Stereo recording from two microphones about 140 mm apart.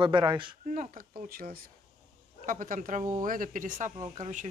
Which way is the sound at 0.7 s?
75° right (ahead or behind).